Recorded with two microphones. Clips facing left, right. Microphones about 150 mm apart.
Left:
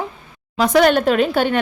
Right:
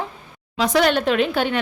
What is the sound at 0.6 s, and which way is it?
Speech, 50° left (ahead or behind).